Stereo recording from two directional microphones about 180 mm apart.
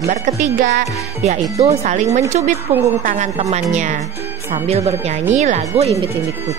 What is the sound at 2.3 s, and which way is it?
A woman's voice, 40° right (ahead or behind).